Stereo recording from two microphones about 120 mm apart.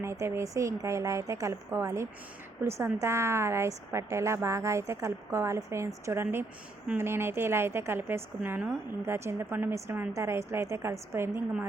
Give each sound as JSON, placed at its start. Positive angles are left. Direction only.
{"t": 0.0, "sound": "a woman's voice", "side_deg": -25}